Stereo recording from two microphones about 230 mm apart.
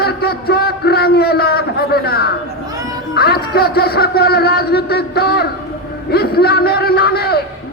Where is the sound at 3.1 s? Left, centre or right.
Left.